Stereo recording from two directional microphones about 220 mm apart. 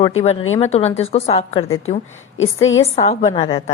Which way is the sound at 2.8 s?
30° left (ahead or behind).